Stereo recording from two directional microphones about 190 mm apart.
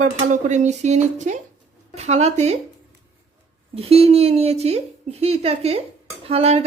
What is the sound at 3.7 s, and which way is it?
Speech, 30° right (ahead or behind).